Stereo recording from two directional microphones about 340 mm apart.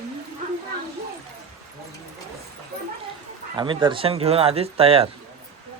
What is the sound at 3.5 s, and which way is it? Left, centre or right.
Speech, centre.